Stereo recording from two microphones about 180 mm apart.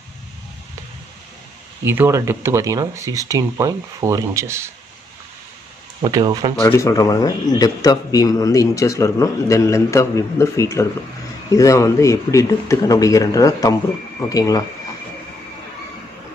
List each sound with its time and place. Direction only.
1.9 s speech: 15° right (ahead or behind)
6.0 s speech: 20° right (ahead or behind)
6.5 s speech: 15° left (ahead or behind)